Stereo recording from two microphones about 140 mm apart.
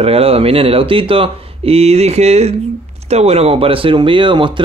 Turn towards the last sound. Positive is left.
turn(degrees=-35)  # may be behind; listen again after turning